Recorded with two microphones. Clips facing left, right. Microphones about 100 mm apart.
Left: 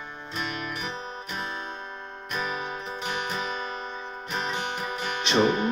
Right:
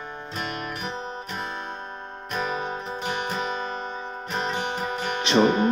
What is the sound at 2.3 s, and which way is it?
Music, 35° right (ahead or behind).